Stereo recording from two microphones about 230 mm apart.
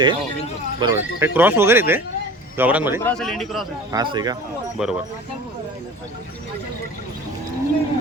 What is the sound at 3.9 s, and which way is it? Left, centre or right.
Speech, centre.